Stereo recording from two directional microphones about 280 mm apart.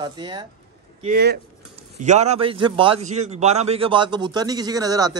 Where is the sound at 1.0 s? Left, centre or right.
Right; by 5.2 s centre.